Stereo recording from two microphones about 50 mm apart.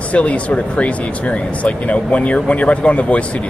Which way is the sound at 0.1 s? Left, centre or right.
Left.